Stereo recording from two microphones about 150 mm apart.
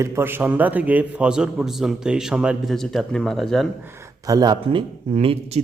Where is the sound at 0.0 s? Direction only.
15° right (ahead or behind); by 3.7 s centre (ahead or behind).